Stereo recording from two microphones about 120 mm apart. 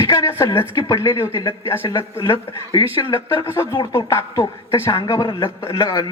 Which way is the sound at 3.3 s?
20° left (ahead or behind).